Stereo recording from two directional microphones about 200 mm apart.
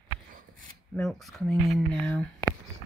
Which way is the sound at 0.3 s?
40° right (ahead or behind).